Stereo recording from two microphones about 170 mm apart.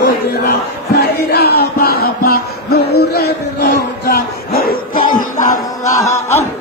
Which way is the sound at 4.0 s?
60° left (ahead or behind).